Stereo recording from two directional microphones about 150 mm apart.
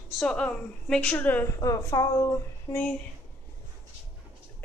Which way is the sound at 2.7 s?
10° left (ahead or behind).